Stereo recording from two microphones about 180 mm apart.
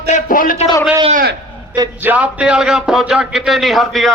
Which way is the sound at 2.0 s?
10° right (ahead or behind).